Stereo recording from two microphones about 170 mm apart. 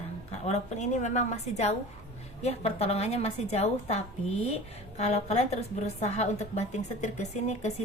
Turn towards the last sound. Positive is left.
turn(degrees=40)  # may be behind; listen again after turning